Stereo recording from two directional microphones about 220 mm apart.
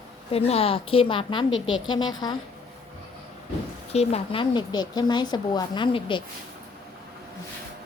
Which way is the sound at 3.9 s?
25° left (ahead or behind).